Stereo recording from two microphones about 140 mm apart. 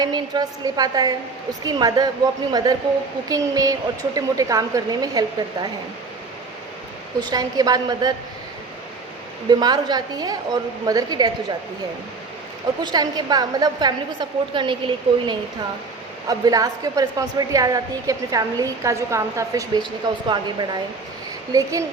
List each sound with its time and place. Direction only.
0.0 s a woman's voice: 30° right (ahead or behind)
7.2 s a woman's voice: 30° right (ahead or behind)
9.5 s a woman's voice: 30° right (ahead or behind)
12.8 s a woman's voice: 30° right (ahead or behind)